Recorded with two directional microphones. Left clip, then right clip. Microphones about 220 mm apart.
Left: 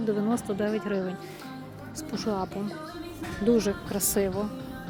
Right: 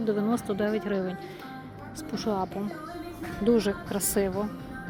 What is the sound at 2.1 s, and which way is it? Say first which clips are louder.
Speech: right 1 dB; 10° left (ahead or behind).